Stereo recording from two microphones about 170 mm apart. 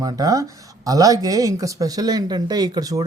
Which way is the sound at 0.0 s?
20° right (ahead or behind).